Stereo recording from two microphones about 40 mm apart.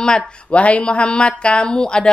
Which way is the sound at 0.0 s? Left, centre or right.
Left.